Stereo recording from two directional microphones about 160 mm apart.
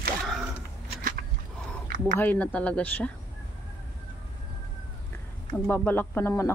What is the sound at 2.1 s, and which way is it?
Speech, 10° left (ahead or behind).